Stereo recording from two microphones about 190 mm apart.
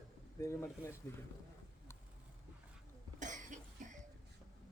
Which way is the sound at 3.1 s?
40° right (ahead or behind).